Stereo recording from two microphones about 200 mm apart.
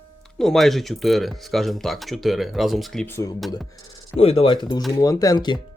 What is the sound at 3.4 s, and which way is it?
Speech, centre (ahead or behind).